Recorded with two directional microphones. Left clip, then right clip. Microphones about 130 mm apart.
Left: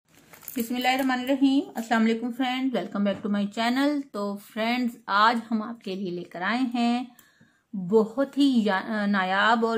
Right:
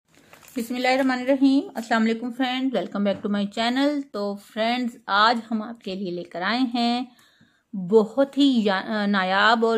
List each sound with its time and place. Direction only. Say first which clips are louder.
0.6 s a woman's voice: right 3 dB; 45° right (ahead or behind)